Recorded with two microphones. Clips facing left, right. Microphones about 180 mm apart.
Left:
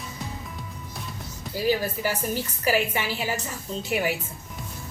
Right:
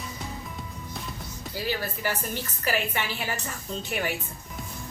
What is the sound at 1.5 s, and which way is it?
Speech, 15° left (ahead or behind).